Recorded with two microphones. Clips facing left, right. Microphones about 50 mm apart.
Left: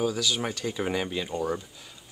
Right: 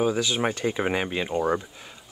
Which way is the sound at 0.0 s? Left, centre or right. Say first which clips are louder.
Right 4 dB; right.